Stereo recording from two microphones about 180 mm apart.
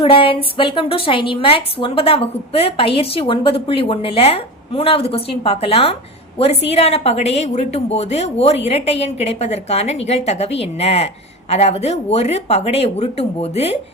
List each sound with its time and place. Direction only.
0.0 s a woman's voice: 30° left (ahead or behind)